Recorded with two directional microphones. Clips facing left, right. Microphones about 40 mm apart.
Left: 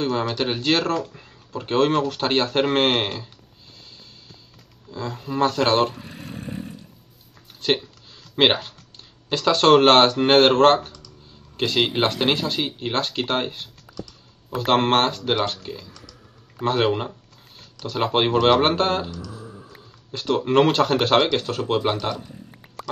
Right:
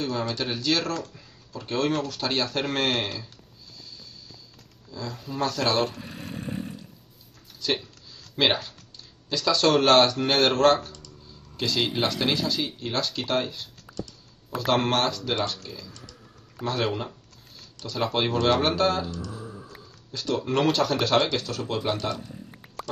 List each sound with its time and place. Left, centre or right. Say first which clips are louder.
0.0 s speech: left 5 dB; left
3.7 s music: right 1 dB; left
4.9 s speech: left 6 dB; left
5.9 s a sound: left 1 dB; centre
7.6 s speech: left 5 dB; left
14.7 s speech: left 5 dB; left
15.6 s speech: left 5 dB; left
16.6 s speech: left 6 dB; left
20.1 s speech: left 5 dB; left